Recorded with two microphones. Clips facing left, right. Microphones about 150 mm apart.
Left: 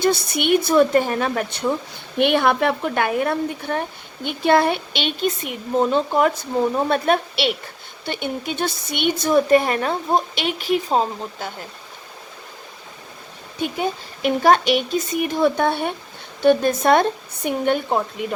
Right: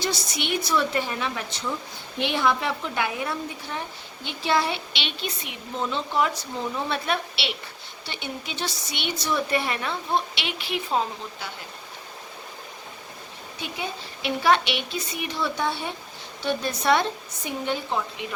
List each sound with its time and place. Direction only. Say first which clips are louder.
0.0 s speech: left 9 dB; 55° left (ahead or behind); by 11.5 s 40° left (ahead or behind)
13.6 s speech: left 9 dB; 45° left (ahead or behind)